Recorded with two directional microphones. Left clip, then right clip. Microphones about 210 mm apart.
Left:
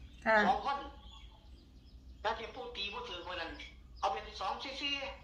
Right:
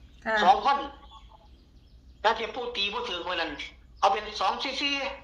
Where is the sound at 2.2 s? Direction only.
55° right (ahead or behind).